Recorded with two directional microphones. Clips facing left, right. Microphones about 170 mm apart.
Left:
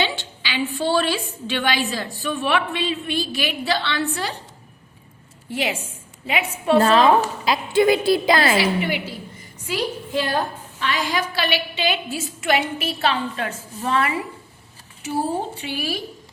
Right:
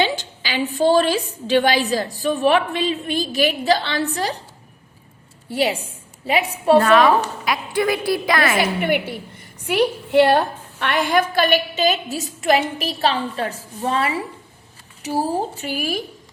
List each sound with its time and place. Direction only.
0.0 s a woman's voice: 40° right (ahead or behind)
5.5 s a woman's voice: 35° right (ahead or behind)
6.7 s a woman's voice: 30° left (ahead or behind)
8.5 s a woman's voice: 55° right (ahead or behind)